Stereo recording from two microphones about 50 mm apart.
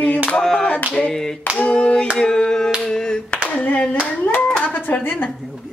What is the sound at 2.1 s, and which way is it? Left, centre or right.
Hands, centre.